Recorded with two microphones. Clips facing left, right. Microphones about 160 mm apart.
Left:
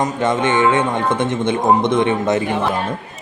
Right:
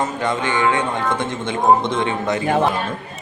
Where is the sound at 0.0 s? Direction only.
20° left (ahead or behind).